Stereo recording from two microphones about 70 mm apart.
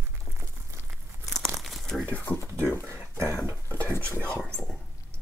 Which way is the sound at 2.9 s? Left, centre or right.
Right.